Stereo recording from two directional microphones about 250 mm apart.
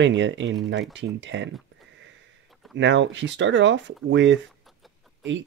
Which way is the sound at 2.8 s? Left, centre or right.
Right.